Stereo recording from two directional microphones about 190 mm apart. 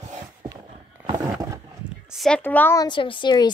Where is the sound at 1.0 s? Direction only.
20° right (ahead or behind).